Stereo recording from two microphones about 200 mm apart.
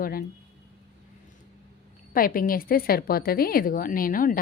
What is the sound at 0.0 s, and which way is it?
Speech, 45° left (ahead or behind).